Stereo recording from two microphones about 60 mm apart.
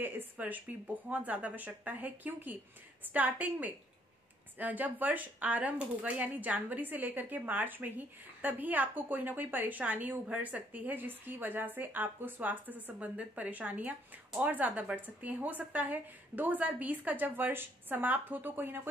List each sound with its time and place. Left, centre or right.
0.0 s speech: right